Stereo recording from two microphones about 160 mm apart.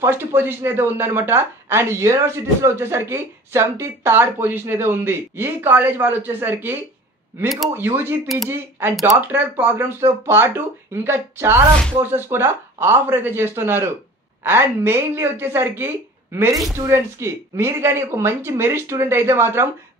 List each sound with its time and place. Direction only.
0.0 s speech: 15° right (ahead or behind)